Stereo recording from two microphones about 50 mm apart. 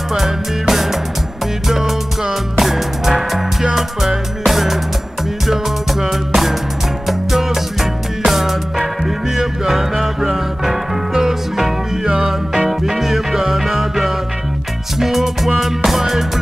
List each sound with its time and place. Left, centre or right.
0.1 s music: centre